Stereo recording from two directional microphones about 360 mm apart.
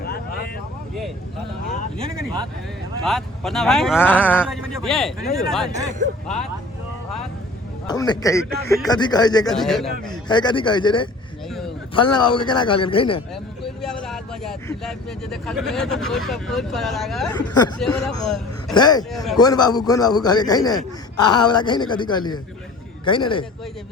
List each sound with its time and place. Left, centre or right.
3.0 s speech: centre
5.7 s speech: right
7.9 s a man's voice: centre
10.1 s a man's voice: centre
12.1 s a man's voice: centre
14.1 s a man's voice: centre
19.1 s speech: centre
19.4 s a man's voice: centre